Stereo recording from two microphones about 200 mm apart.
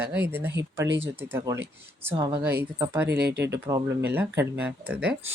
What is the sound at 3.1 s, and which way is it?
Speech, 55° right (ahead or behind).